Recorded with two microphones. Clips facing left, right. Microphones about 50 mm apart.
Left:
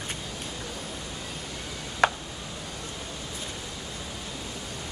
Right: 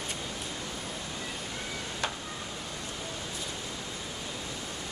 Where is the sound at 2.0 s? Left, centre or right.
Left.